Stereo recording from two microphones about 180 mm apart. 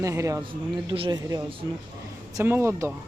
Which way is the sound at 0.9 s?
25° right (ahead or behind).